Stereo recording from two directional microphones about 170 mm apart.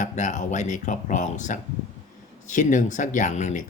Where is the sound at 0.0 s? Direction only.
45° left (ahead or behind).